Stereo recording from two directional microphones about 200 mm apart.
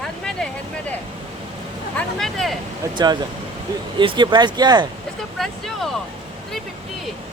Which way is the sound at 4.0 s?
25° right (ahead or behind).